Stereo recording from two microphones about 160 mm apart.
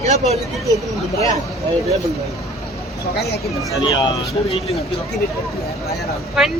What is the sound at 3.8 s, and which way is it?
Speech, 35° left (ahead or behind).